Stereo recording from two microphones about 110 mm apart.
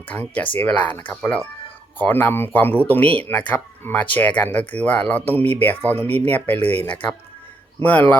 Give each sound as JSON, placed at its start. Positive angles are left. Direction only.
{"t": 0.1, "sound": "speech", "side_deg": 15}